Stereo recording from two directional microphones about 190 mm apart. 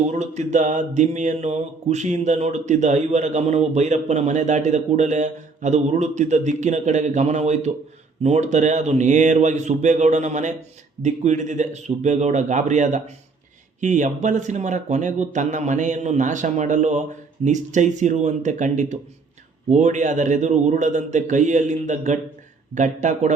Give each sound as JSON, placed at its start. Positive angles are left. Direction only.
{"t": 0.1, "sound": "speech", "side_deg": -35}